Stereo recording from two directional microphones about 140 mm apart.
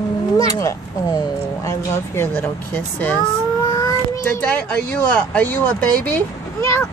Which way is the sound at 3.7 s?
20° left (ahead or behind).